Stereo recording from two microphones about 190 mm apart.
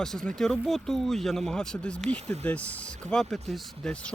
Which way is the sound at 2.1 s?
35° right (ahead or behind).